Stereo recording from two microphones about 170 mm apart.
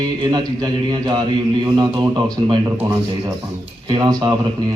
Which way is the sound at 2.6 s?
15° right (ahead or behind).